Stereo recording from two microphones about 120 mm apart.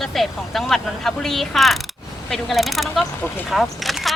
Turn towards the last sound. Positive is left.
turn(degrees=0)  # may be behind; listen again after turning